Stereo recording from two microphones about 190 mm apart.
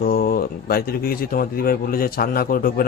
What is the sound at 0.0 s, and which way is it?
Speech, 50° left (ahead or behind).